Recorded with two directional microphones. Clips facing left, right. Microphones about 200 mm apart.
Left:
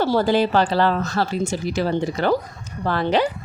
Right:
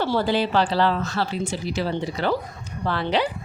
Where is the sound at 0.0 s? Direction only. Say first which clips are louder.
Left 4 dB; 45° left (ahead or behind).